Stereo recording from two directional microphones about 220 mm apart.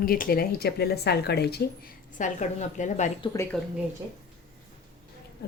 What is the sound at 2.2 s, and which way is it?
A woman's voice, 35° left (ahead or behind).